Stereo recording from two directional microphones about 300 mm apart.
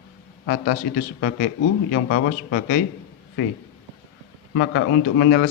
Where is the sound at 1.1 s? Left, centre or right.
Left.